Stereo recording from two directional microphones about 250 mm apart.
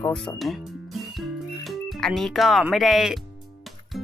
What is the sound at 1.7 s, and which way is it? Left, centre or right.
Speech, centre.